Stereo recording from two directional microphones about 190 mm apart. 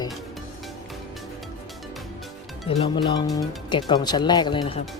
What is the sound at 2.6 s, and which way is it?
Speech, 30° left (ahead or behind).